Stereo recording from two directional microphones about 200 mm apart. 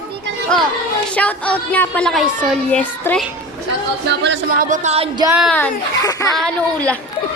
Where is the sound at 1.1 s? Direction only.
5° left (ahead or behind).